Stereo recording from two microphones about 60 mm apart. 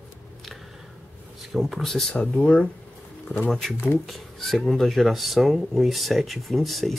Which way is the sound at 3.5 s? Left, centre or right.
Centre.